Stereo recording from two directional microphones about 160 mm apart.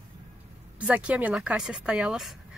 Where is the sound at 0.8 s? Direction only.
10° right (ahead or behind).